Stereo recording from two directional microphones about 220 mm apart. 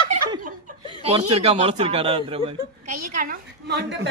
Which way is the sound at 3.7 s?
50° right (ahead or behind).